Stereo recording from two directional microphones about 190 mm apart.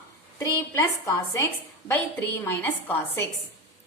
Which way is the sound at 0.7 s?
15° left (ahead or behind).